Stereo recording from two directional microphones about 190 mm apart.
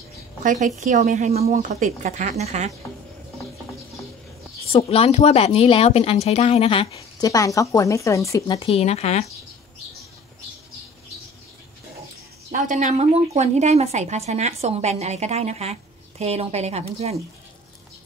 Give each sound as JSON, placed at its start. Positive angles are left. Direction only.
{"t": 0.4, "sound": "a woman's voice", "side_deg": -40}
{"t": 4.7, "sound": "speech", "side_deg": 30}
{"t": 7.0, "sound": "speech", "side_deg": 20}
{"t": 8.5, "sound": "speech", "side_deg": 30}
{"t": 12.4, "sound": "a woman's voice", "side_deg": -40}